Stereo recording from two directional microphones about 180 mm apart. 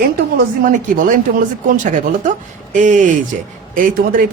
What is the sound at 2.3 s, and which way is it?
Speech, 45° right (ahead or behind).